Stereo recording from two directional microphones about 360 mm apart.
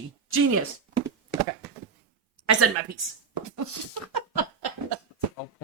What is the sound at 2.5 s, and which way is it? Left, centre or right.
Speech, right.